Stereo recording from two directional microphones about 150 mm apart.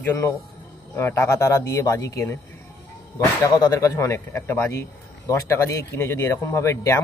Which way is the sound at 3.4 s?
25° left (ahead or behind).